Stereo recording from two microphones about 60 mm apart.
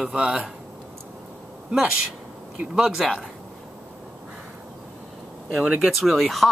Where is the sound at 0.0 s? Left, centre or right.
Centre.